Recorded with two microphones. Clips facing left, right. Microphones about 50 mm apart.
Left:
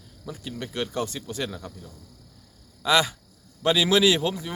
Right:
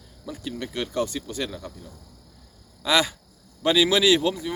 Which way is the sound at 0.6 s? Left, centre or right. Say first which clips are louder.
Right 2 dB; centre.